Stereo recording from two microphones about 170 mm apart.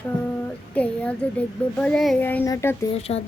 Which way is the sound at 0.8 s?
10° left (ahead or behind).